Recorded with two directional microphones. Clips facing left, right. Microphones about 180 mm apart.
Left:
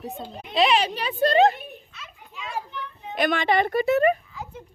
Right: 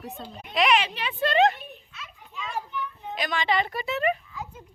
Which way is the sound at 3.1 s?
55° left (ahead or behind).